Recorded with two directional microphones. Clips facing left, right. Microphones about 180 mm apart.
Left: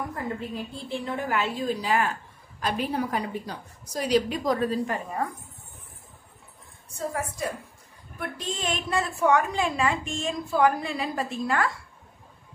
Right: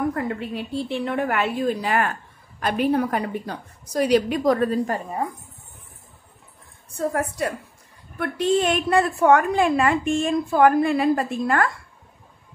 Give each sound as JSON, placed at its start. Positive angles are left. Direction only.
{"t": 0.1, "sound": "a woman's voice", "side_deg": -70}
{"t": 7.0, "sound": "a woman's voice", "side_deg": -60}